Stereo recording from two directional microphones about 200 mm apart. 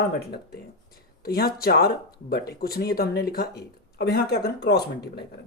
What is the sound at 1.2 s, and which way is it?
Speech, 50° left (ahead or behind).